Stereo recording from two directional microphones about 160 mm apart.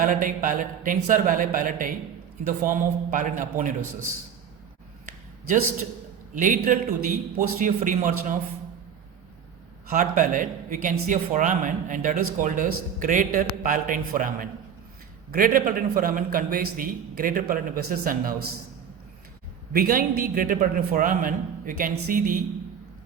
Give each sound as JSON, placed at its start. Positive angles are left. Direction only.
{"t": 0.0, "sound": "speech", "side_deg": -55}
{"t": 6.3, "sound": "a man's voice", "side_deg": -55}
{"t": 10.0, "sound": "speech", "side_deg": -55}
{"t": 19.7, "sound": "speech", "side_deg": -65}